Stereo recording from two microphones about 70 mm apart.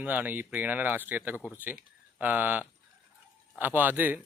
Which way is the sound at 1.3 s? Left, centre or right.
Left.